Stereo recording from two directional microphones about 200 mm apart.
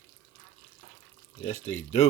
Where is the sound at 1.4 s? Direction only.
35° left (ahead or behind).